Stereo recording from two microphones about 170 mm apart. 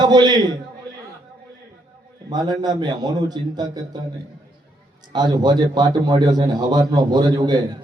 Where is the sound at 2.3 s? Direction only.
25° right (ahead or behind).